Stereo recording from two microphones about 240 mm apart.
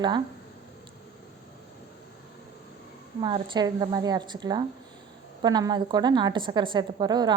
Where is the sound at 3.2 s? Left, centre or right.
Centre.